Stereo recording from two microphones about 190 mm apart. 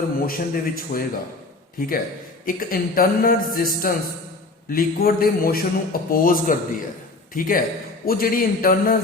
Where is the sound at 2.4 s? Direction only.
45° left (ahead or behind).